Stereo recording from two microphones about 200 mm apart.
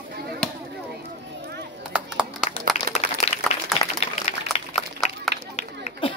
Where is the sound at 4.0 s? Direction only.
30° left (ahead or behind).